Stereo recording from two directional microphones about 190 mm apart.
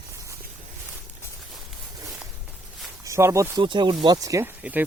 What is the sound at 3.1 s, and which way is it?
Speech, 15° right (ahead or behind).